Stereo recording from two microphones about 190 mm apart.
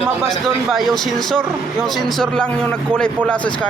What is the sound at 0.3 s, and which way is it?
Speech, centre (ahead or behind).